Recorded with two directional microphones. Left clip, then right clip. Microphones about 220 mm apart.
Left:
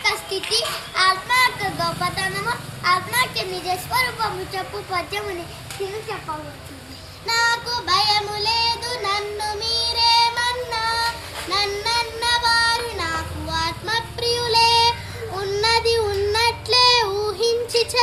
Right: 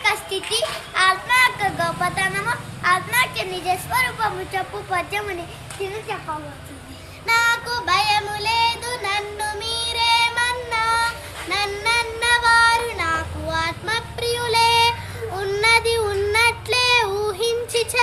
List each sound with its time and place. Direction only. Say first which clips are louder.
0.0 s child singing: right 1 dB; centre (ahead or behind)
7.3 s child singing: right 2 dB; 10° right (ahead or behind)
17.1 s music: even; 25° right (ahead or behind)
17.3 s music: left 2 dB; 5° right (ahead or behind)